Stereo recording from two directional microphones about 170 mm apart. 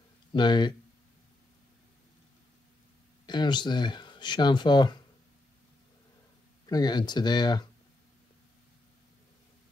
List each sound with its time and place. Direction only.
0.3 s speech: 25° left (ahead or behind)
3.3 s speech: 25° left (ahead or behind)
6.6 s speech: 25° left (ahead or behind)